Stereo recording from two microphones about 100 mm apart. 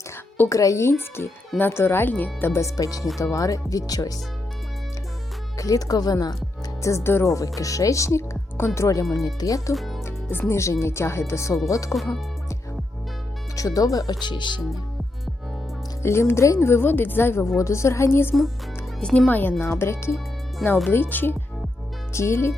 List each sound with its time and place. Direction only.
0.3 s speech: 30° left (ahead or behind)
5.5 s speech: 35° left (ahead or behind)
6.8 s speech: 25° left (ahead or behind)
9.7 s speech: centre (ahead or behind)
10.1 s music: 25° left (ahead or behind)
10.5 s speech: 30° left (ahead or behind)
11.9 s speech: centre (ahead or behind)
13.6 s speech: 35° left (ahead or behind); by 14.6 s 50° left (ahead or behind)
16.0 s speech: 25° left (ahead or behind)
18.9 s speech: 5° left (ahead or behind)
19.3 s speech: 20° left (ahead or behind)